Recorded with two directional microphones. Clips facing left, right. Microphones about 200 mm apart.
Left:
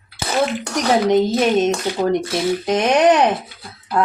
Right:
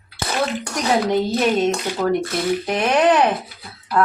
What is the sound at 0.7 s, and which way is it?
Speech, 20° left (ahead or behind).